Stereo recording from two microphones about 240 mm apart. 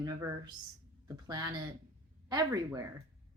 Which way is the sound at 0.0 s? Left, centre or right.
Centre.